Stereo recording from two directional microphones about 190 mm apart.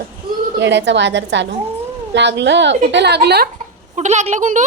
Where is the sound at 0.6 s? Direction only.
70° right (ahead or behind).